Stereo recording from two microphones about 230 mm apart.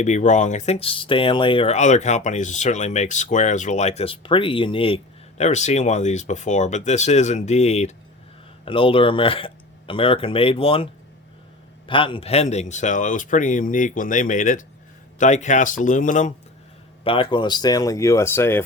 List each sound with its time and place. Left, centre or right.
0.0 s speech: left
11.9 s speech: left
17.0 s speech: left